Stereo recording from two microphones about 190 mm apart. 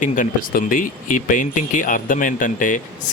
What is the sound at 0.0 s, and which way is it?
Speech, 45° left (ahead or behind).